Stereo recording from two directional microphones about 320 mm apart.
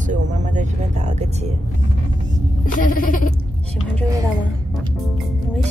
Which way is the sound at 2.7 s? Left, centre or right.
Left.